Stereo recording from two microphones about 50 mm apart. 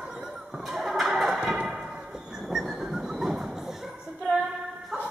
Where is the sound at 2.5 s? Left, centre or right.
Centre.